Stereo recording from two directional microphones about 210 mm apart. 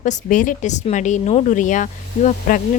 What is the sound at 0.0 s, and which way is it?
Speech, 35° left (ahead or behind).